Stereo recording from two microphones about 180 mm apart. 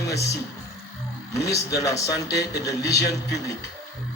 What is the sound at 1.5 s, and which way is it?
Speech, 20° left (ahead or behind).